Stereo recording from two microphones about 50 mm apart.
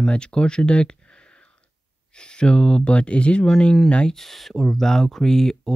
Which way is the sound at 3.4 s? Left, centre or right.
Centre.